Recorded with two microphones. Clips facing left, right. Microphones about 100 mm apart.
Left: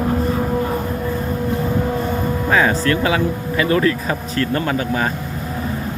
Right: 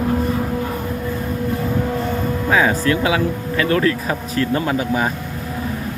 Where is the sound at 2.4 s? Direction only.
5° right (ahead or behind).